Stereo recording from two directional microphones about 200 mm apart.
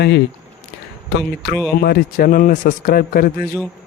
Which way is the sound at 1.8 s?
50° left (ahead or behind).